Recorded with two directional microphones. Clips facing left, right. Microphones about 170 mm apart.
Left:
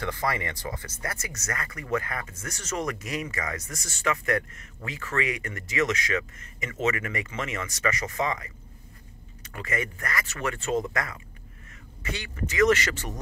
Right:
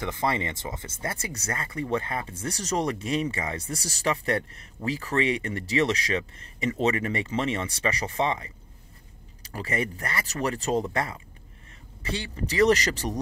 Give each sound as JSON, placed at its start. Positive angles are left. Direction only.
{"t": 0.0, "sound": "speech", "side_deg": -25}